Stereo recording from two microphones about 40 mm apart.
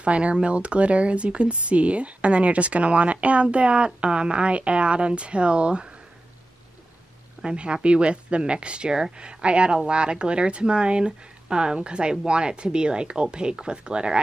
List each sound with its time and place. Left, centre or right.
0.0 s speech: right
7.4 s speech: right